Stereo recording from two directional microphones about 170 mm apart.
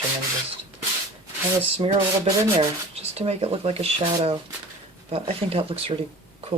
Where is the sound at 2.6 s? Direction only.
35° right (ahead or behind).